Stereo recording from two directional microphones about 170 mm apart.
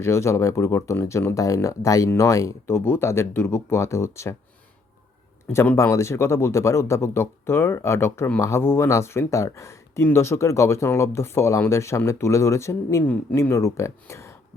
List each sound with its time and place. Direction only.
0.0 s speech: 15° left (ahead or behind)
5.5 s speech: 15° left (ahead or behind)